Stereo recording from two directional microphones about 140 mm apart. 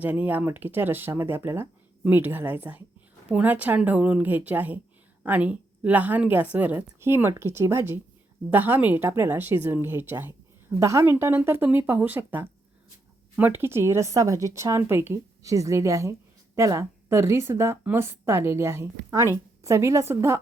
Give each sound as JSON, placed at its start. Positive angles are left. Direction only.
{"t": 0.0, "sound": "speech", "side_deg": -10}